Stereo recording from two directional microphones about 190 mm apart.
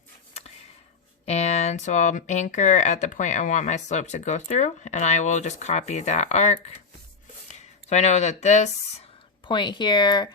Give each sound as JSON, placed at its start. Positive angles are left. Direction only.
{"t": 1.2, "sound": "speech", "side_deg": 35}
{"t": 9.5, "sound": "speech", "side_deg": 25}